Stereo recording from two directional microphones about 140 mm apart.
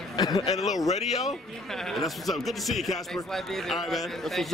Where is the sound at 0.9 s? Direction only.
50° left (ahead or behind).